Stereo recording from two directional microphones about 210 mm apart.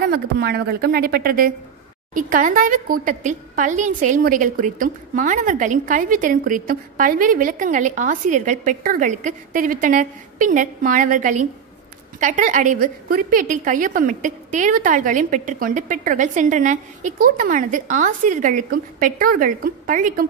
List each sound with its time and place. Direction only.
0.1 s a woman's voice: 50° right (ahead or behind)